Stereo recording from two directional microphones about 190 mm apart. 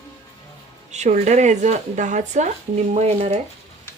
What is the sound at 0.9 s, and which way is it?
Speech, 35° right (ahead or behind).